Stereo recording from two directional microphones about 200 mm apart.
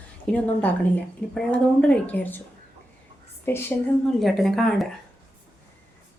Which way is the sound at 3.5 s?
10° left (ahead or behind).